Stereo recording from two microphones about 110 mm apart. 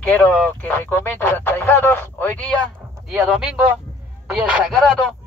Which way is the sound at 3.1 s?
5° right (ahead or behind).